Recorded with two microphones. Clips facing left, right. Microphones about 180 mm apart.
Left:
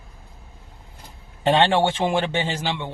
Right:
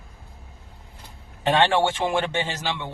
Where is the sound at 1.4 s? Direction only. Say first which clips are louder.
Left 2 dB; 20° left (ahead or behind).